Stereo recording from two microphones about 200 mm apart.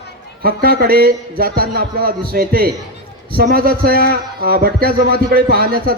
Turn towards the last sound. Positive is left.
turn(degrees=-50)  # may be behind; listen again after turning